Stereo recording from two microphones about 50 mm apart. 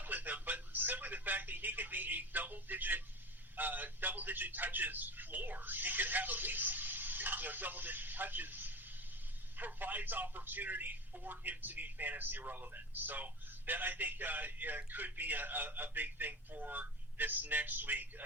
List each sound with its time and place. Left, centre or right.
0.0 s telephone: right
3.6 s a man's voice: right